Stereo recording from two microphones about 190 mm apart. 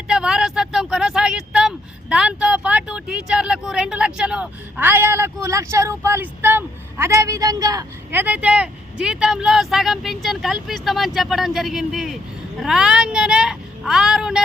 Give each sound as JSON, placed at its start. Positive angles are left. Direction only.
{"t": 0.1, "sound": "a woman's voice", "side_deg": -5}